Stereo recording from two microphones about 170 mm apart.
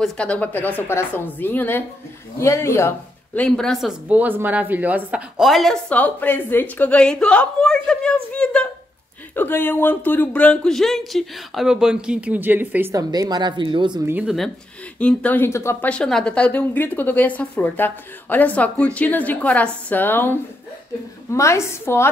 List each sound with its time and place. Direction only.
0.0 s speech: 5° left (ahead or behind)
3.3 s speech: 5° left (ahead or behind); by 14.0 s 25° right (ahead or behind)
14.0 s speech: 10° right (ahead or behind)
15.0 s speech: 10° left (ahead or behind)